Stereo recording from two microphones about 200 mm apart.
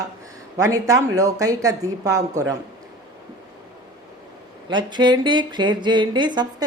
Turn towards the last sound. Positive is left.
turn(degrees=-20)  # may be behind; listen again after turning